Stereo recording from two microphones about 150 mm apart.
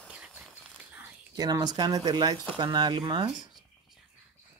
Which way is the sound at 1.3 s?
25° right (ahead or behind).